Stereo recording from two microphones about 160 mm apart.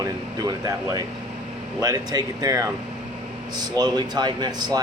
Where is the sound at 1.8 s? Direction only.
20° right (ahead or behind).